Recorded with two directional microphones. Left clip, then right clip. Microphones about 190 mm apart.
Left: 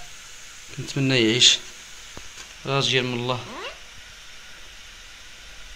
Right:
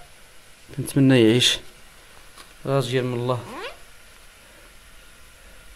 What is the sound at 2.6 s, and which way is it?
Speech, 40° right (ahead or behind).